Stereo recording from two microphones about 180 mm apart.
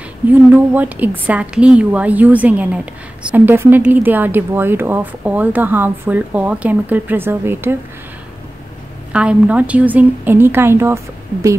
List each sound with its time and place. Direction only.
0.3 s a woman's voice: 10° right (ahead or behind)
9.1 s a woman's voice: 5° right (ahead or behind)